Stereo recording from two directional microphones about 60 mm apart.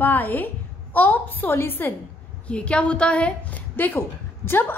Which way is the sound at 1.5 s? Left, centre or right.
Left.